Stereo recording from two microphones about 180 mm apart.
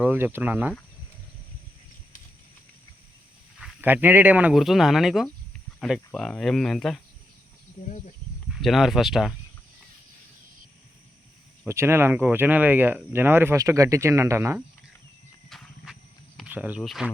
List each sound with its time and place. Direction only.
0.0 s speech: 10° right (ahead or behind)
3.6 s speech: 10° right (ahead or behind)
7.9 s speech: 40° left (ahead or behind)
8.4 s speech: centre (ahead or behind)
11.6 s speech: 15° right (ahead or behind)
15.4 s a sound: centre (ahead or behind)
16.5 s speech: 10° right (ahead or behind)